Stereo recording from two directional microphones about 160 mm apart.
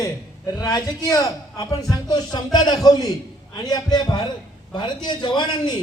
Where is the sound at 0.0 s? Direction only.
20° left (ahead or behind).